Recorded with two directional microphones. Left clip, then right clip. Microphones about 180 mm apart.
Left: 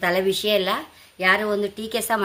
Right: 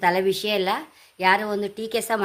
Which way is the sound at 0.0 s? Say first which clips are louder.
Even; 40° right (ahead or behind).